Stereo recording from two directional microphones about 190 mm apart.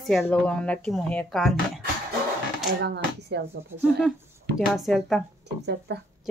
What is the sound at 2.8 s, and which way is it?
Speech, 60° right (ahead or behind).